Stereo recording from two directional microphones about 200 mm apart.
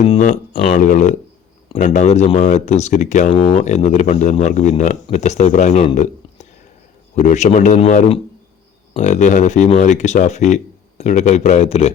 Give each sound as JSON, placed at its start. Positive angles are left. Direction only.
{"t": 0.0, "sound": "speech", "side_deg": 35}